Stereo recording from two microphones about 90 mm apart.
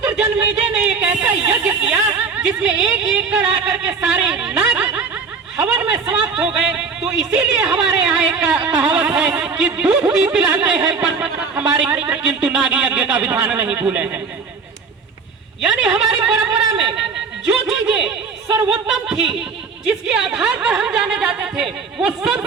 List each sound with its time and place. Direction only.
0.0 s speech: 15° right (ahead or behind)
5.5 s chatter: 10° right (ahead or behind)
6.3 s a man's voice: 5° right (ahead or behind)
15.6 s speech: 5° right (ahead or behind)